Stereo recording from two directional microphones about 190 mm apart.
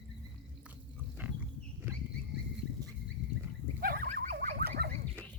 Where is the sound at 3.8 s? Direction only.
50° right (ahead or behind).